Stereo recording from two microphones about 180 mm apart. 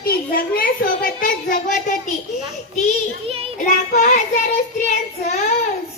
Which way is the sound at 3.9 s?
45° left (ahead or behind).